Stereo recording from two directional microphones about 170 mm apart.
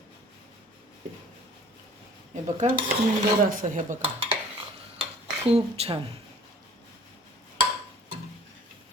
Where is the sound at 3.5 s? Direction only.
50° right (ahead or behind).